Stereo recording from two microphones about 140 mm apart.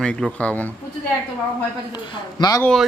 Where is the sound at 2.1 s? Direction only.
30° left (ahead or behind).